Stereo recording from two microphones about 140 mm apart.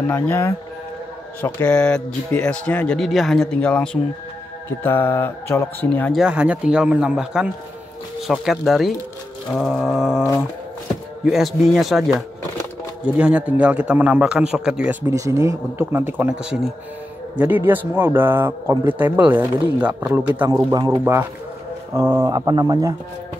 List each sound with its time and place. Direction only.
0.1 s speech: 15° left (ahead or behind)
6.1 s a man's voice: 5° right (ahead or behind)
15.0 s a man's voice: 25° right (ahead or behind)